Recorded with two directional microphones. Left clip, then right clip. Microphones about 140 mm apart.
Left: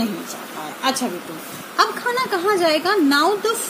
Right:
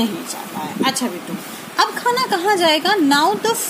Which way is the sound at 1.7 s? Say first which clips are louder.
Right 2 dB; 85° right.